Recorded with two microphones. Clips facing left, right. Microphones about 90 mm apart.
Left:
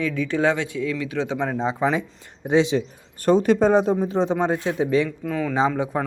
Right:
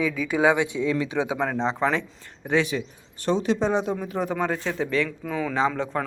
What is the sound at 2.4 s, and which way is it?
Speech, 20° left (ahead or behind).